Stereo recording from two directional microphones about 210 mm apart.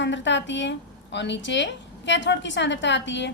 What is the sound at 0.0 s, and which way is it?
A woman's voice, 60° left (ahead or behind).